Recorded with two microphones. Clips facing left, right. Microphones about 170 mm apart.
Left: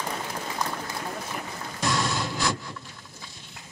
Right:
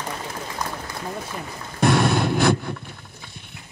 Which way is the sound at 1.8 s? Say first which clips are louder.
Right 9 dB; 60° right (ahead or behind).